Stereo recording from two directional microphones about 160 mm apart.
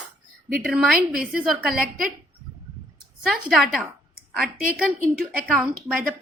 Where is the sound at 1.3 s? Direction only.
65° right (ahead or behind).